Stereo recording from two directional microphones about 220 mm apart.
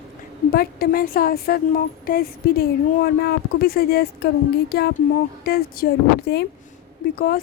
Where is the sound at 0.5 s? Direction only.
45° left (ahead or behind).